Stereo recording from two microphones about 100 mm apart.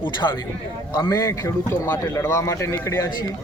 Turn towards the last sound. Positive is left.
turn(degrees=30)  # may be behind; listen again after turning